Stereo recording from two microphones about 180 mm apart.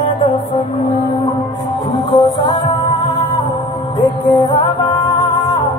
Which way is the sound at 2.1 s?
25° left (ahead or behind).